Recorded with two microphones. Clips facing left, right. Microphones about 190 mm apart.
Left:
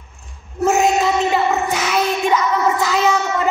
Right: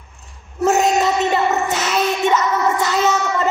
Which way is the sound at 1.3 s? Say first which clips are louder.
Even; 10° left (ahead or behind).